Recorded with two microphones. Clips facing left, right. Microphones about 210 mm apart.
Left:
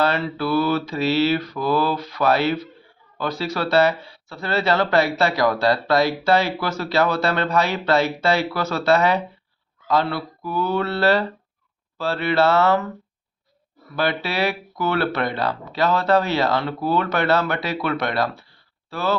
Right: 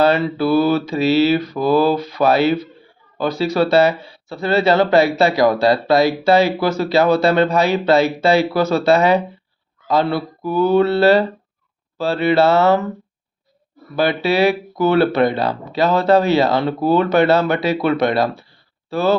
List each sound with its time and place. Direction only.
0.0 s speech: 15° right (ahead or behind)
13.9 s speech: 15° right (ahead or behind)